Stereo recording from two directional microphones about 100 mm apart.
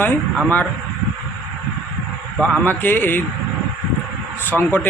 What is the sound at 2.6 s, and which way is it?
Speech, 20° left (ahead or behind).